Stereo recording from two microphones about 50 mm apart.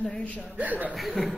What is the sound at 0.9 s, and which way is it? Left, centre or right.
Speech, centre.